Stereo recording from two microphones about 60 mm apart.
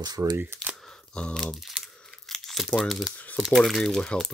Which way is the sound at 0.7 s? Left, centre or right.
Centre.